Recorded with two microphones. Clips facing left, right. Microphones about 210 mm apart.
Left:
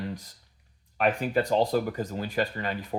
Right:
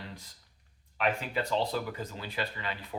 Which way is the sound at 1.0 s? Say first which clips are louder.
Left 6 dB; 45° left (ahead or behind).